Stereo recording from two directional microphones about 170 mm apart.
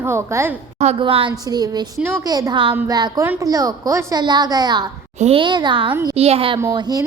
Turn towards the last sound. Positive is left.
turn(degrees=-25)  # may be behind; listen again after turning